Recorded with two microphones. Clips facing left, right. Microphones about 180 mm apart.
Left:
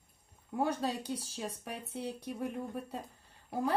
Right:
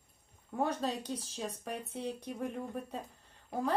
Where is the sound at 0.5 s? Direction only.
10° left (ahead or behind).